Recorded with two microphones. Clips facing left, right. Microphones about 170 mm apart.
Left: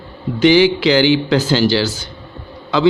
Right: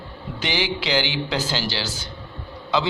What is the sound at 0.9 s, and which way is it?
Speech, 55° left (ahead or behind).